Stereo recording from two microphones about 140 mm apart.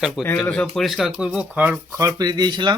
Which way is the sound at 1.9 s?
25° right (ahead or behind).